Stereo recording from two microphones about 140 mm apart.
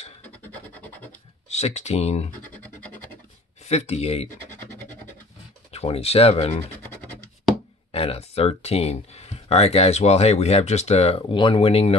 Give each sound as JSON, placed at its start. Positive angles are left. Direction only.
{"t": 1.5, "sound": "speech", "side_deg": 50}
{"t": 3.6, "sound": "speech", "side_deg": 50}
{"t": 5.7, "sound": "speech", "side_deg": 45}
{"t": 6.8, "sound": "scratch", "side_deg": 10}
{"t": 7.9, "sound": "speech", "side_deg": 45}
{"t": 11.1, "sound": "speech", "side_deg": 35}